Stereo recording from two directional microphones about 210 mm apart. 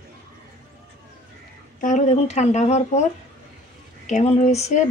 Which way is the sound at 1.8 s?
35° left (ahead or behind).